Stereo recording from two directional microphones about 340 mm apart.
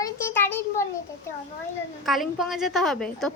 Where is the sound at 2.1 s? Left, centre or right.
Centre.